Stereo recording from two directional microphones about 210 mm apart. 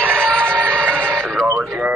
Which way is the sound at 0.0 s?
5° left (ahead or behind).